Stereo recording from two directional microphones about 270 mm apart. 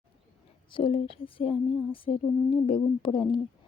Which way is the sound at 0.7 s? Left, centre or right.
Centre.